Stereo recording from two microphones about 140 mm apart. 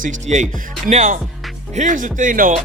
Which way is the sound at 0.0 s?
60° right (ahead or behind).